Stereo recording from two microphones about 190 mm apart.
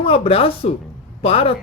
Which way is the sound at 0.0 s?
30° left (ahead or behind).